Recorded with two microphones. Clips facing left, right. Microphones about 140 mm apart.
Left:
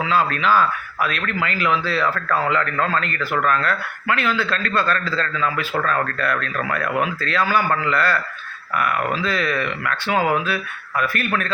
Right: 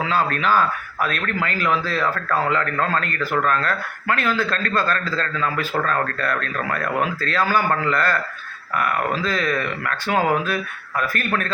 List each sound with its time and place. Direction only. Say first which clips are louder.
0.1 s speech: left 2 dB; 45° right (ahead or behind)